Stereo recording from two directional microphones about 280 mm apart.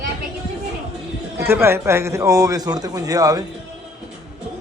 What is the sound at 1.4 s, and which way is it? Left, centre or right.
A man's voice, centre.